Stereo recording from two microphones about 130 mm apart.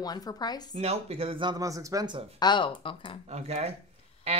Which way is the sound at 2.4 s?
35° left (ahead or behind).